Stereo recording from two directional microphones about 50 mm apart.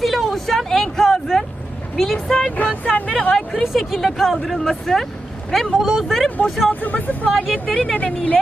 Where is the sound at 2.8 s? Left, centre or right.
Left.